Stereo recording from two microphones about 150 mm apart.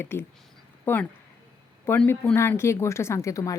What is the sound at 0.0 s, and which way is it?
Speech, 15° left (ahead or behind).